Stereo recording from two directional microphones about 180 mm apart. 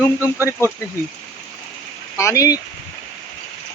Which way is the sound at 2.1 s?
15° left (ahead or behind).